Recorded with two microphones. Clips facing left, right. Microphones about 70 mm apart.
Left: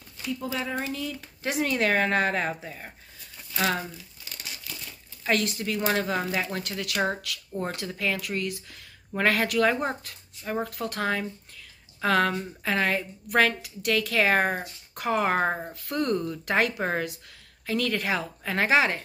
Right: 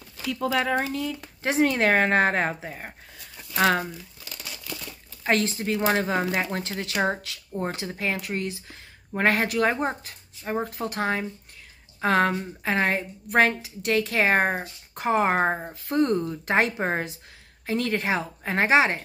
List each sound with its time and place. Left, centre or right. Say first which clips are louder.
0.3 s speech: right 6 dB; right
0.7 s speech: right 4 dB; right
5.2 s a woman's voice: right 2 dB; right